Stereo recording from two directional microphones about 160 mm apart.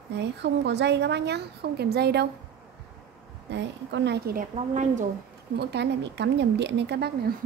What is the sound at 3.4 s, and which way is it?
A woman's voice, 90° right.